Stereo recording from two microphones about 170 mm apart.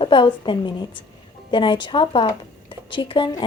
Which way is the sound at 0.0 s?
30° left (ahead or behind).